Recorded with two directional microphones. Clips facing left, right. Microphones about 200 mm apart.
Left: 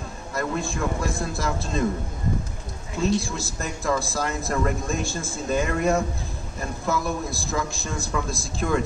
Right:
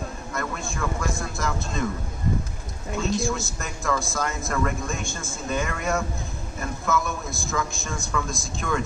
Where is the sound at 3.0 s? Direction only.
35° left (ahead or behind).